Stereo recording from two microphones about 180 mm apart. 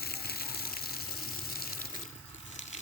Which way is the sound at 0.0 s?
60° left (ahead or behind).